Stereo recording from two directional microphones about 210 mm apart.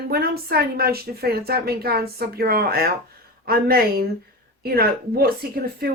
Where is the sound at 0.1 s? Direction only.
45° right (ahead or behind).